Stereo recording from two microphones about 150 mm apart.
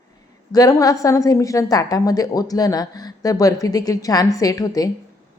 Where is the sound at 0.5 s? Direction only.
25° left (ahead or behind).